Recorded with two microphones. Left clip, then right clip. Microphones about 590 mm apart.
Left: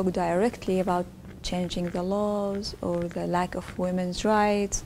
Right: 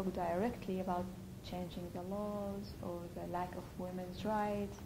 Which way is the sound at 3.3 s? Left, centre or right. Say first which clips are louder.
Left 12 dB; left.